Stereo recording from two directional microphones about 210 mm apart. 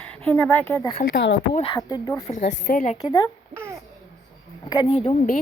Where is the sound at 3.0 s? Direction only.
15° left (ahead or behind).